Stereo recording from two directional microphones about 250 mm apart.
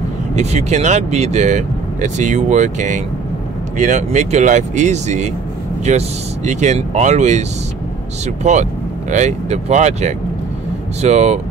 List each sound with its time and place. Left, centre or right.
0.4 s speech: right
8.4 s speech: right